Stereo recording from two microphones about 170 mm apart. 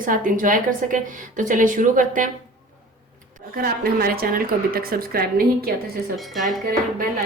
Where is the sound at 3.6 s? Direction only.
65° right (ahead or behind).